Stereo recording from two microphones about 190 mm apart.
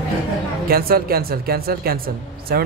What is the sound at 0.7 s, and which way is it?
A woman's voice, 55° right (ahead or behind).